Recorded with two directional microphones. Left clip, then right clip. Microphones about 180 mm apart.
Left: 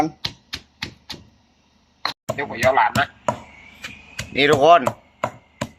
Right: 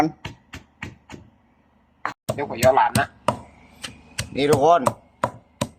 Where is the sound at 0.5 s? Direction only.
15° left (ahead or behind).